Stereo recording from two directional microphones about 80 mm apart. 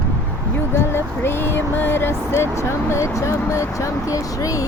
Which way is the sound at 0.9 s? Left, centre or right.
Left.